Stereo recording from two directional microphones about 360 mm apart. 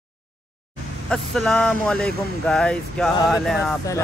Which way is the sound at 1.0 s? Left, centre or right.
Centre.